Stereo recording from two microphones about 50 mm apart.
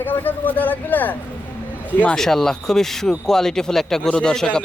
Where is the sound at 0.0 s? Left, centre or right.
Left.